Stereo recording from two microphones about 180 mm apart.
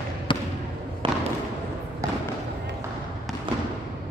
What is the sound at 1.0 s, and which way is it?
Basketball bounce, 30° right (ahead or behind).